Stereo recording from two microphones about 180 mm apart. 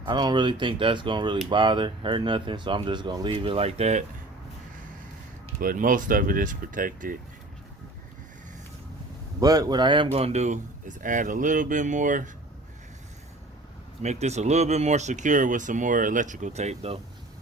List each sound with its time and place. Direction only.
0.0 s speech: 25° right (ahead or behind)
5.5 s speech: 50° right (ahead or behind)
9.4 s speech: 20° right (ahead or behind); by 12.3 s 45° right (ahead or behind)
14.0 s speech: 40° right (ahead or behind)